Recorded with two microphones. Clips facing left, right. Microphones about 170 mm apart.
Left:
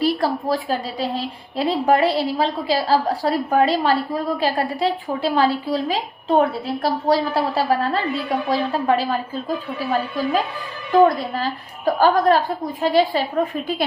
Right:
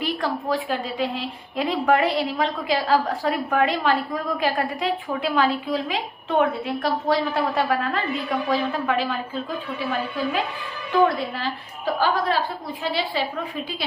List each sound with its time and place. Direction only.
0.0 s a woman's voice: 35° left (ahead or behind)